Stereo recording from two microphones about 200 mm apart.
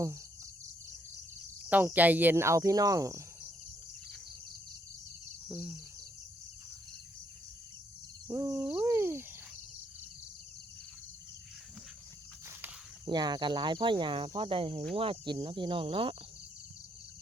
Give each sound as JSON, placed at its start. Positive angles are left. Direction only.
{"t": 1.7, "sound": "cricket", "side_deg": -10}
{"t": 5.5, "sound": "bird", "side_deg": -5}
{"t": 8.3, "sound": "a sound", "side_deg": -15}
{"t": 13.1, "sound": "speech", "side_deg": -20}